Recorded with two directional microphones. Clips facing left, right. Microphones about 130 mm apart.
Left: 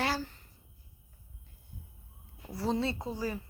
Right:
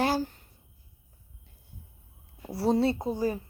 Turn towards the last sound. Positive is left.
turn(degrees=-50)  # may be behind; listen again after turning